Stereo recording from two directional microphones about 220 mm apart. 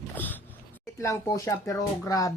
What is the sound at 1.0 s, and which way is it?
A child's voice, 15° left (ahead or behind).